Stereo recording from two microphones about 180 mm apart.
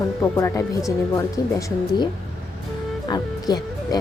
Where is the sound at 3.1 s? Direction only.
20° left (ahead or behind).